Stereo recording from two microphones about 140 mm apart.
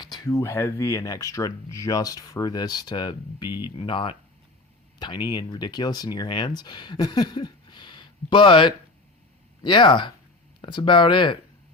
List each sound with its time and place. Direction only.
0.0 s speech: 25° left (ahead or behind)